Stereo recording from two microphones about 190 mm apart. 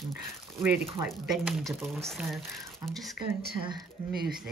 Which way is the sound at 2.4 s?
15° right (ahead or behind).